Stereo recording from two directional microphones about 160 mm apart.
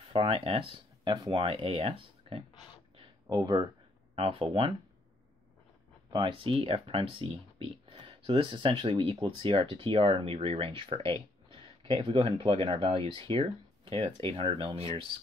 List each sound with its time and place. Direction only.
0.1 s speech: 35° right (ahead or behind)
3.0 s a sound: 25° right (ahead or behind)
4.1 s speech: 35° right (ahead or behind)
6.1 s speech: 30° right (ahead or behind)